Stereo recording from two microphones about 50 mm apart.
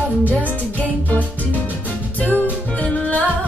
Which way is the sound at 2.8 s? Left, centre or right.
Left.